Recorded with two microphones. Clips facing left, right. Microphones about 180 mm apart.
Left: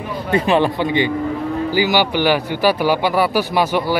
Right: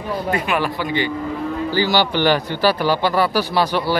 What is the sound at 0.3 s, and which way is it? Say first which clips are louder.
A man's voice: left 7 dB; 25° left (ahead or behind).